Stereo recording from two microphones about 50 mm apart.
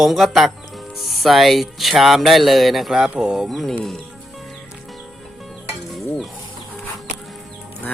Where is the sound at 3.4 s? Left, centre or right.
Centre.